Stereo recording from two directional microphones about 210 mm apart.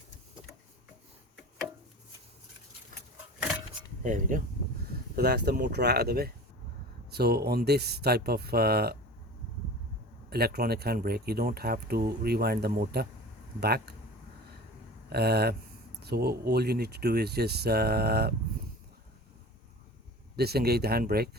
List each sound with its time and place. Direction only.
4.0 s speech: 40° right (ahead or behind)
5.1 s speech: 50° right (ahead or behind)
10.2 s speech: 50° right (ahead or behind)
15.1 s speech: 50° right (ahead or behind)
20.3 s speech: 50° right (ahead or behind)